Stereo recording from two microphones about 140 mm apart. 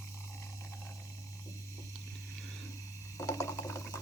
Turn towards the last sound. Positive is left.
turn(degrees=20)  # may be behind; listen again after turning